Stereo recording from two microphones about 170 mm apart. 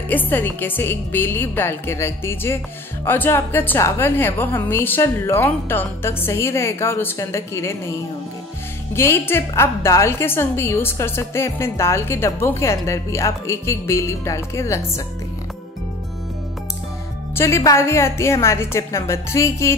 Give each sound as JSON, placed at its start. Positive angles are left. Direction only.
{"t": 0.1, "sound": "a woman's voice", "side_deg": 10}
{"t": 8.9, "sound": "a woman's voice", "side_deg": 15}
{"t": 17.4, "sound": "a woman's voice", "side_deg": 15}